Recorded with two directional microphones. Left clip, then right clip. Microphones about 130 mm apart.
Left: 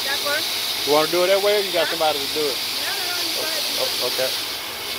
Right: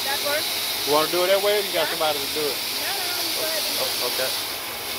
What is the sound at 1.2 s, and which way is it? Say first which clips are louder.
Speech: left 2 dB; 35° left (ahead or behind).